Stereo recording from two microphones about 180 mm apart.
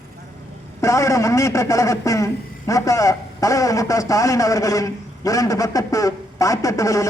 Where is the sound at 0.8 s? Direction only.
15° left (ahead or behind).